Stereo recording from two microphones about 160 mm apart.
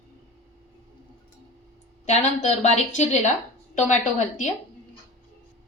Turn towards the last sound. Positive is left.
turn(degrees=50)  # may be behind; listen again after turning